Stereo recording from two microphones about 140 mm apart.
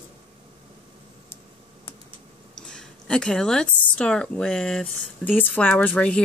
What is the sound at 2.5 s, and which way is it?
Speech, 5° left (ahead or behind).